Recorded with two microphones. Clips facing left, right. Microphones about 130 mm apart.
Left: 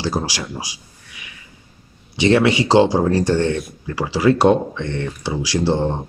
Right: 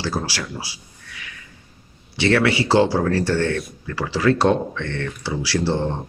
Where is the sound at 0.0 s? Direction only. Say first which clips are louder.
Left 3 dB; 15° left (ahead or behind).